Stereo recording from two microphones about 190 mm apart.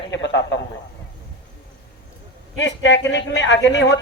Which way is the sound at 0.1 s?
70° left (ahead or behind).